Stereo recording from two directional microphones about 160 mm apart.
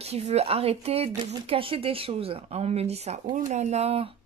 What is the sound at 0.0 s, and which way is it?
Speech, 40° right (ahead or behind).